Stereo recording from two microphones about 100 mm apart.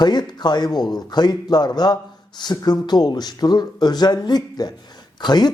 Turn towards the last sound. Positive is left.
turn(degrees=45)  # may be behind; listen again after turning